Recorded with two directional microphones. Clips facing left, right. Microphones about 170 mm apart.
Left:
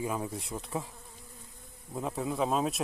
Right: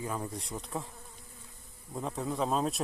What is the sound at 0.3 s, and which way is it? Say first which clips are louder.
Speech: left 2 dB; centre (ahead or behind).